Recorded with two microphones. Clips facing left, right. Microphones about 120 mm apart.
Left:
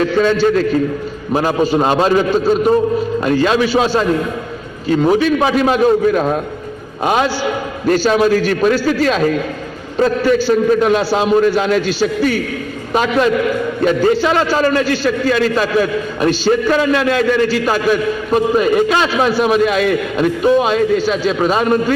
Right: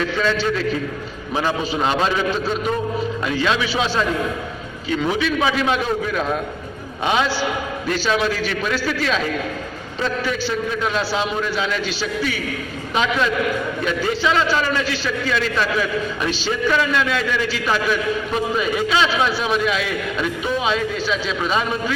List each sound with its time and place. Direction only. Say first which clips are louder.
0.0 s a man's voice: left 8 dB; 40° left (ahead or behind)